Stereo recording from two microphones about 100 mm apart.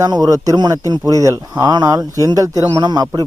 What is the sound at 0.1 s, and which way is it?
A man's voice, 35° right (ahead or behind).